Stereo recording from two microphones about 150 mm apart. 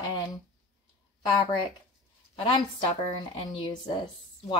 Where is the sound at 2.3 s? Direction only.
35° left (ahead or behind).